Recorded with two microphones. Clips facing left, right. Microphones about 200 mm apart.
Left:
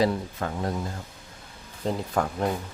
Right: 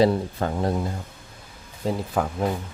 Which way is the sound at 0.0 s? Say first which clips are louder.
Right 5 dB; 30° right (ahead or behind).